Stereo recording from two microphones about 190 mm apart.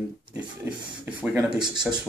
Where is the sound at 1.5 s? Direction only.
25° right (ahead or behind).